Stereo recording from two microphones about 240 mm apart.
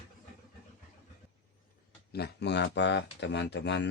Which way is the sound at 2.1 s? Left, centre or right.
Left.